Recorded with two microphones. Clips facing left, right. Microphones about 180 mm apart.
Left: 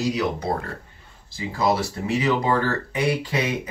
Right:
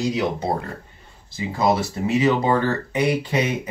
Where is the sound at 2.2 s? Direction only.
20° right (ahead or behind).